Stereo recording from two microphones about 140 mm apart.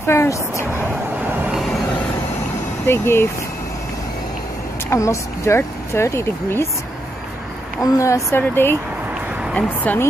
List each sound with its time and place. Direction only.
0.0 s speech: 20° left (ahead or behind)
2.9 s speech: 15° left (ahead or behind)
4.9 s speech: 20° left (ahead or behind)
7.8 s speech: 20° left (ahead or behind)